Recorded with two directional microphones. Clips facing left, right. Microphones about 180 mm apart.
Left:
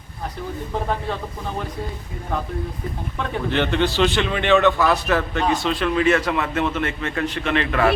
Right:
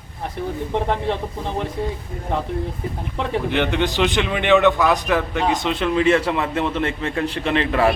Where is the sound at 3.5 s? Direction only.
15° right (ahead or behind).